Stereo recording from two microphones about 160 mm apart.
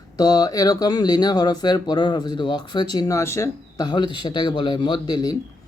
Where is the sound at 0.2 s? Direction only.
25° left (ahead or behind).